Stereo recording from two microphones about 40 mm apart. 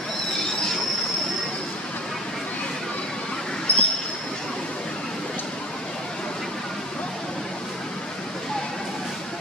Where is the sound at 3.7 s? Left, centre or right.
Left.